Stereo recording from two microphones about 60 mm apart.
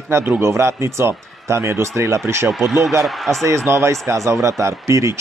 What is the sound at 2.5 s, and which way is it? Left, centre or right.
Speech, centre.